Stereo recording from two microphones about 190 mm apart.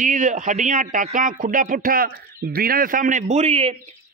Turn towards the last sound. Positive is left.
turn(degrees=-35)  # may be behind; listen again after turning